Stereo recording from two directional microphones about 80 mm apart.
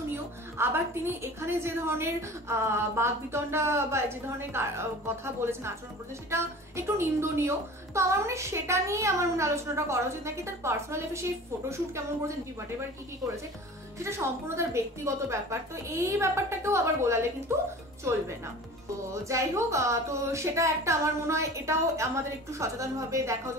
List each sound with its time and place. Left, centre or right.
0.1 s a woman's voice: right
13.9 s a woman's voice: right
19.2 s a woman's voice: right